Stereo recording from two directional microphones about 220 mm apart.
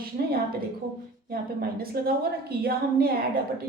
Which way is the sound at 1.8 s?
45° right (ahead or behind).